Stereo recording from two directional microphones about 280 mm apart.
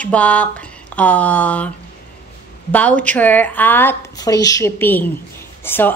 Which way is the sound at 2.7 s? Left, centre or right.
Centre.